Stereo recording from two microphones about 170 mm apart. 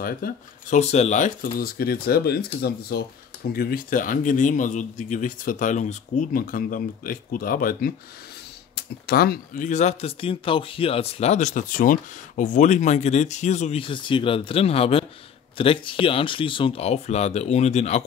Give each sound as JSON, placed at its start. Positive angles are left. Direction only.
{"t": 0.0, "sound": "speech", "side_deg": 55}
{"t": 0.7, "sound": "speech", "side_deg": 40}
{"t": 3.5, "sound": "speech", "side_deg": 55}
{"t": 8.7, "sound": "speech", "side_deg": 70}